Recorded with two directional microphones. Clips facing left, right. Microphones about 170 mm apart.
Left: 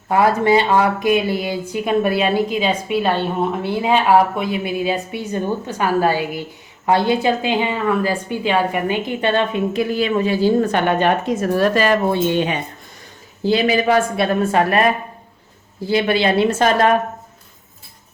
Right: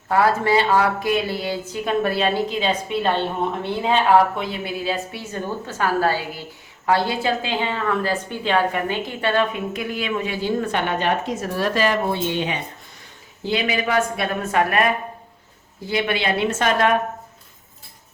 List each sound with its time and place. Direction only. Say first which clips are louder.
0.1 s a woman's voice: left 3 dB; 20° left (ahead or behind); by 12.5 s 50° left (ahead or behind)
13.4 s a woman's voice: left 6 dB; 35° left (ahead or behind)